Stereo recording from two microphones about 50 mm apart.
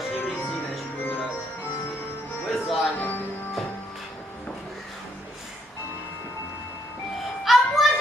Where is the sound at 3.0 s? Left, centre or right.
Left.